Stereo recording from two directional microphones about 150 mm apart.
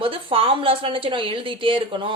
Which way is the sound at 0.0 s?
35° right (ahead or behind).